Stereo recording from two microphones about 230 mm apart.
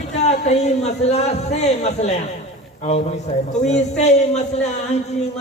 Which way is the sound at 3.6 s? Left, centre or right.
Left.